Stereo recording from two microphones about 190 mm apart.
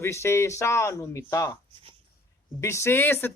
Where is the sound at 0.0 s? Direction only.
15° left (ahead or behind).